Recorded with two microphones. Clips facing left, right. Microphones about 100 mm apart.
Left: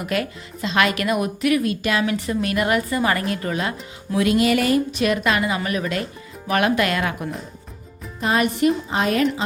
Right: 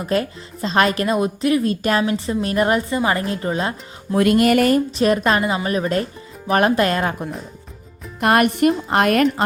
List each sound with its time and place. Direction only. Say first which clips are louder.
0.0 s a woman's voice: right 3 dB; 35° right (ahead or behind)
2.0 s speech: right 1 dB; 30° right (ahead or behind)
4.1 s music: right 3 dB; 50° right (ahead or behind)
4.9 s a woman's voice: right 3 dB; 35° right (ahead or behind)
8.2 s speech: right 4 dB; 60° right (ahead or behind)